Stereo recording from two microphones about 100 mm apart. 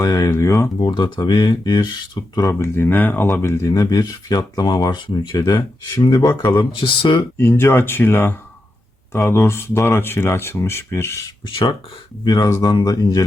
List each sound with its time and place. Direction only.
0.0 s speech: 40° left (ahead or behind)
0.8 s speech: 50° left (ahead or behind)
2.5 s speech: 25° left (ahead or behind); by 7.3 s 55° left (ahead or behind)
7.3 s speech: 25° left (ahead or behind)
11.4 s speech: 55° left (ahead or behind)
12.2 s speech: 45° left (ahead or behind)